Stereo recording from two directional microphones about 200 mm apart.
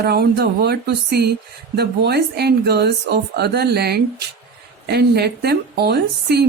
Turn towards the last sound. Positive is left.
turn(degrees=-55)  # may be behind; listen again after turning